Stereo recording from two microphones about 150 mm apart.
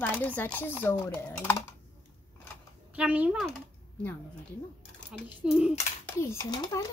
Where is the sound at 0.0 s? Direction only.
10° left (ahead or behind).